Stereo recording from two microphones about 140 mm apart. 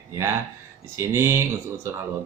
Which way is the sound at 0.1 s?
20° right (ahead or behind).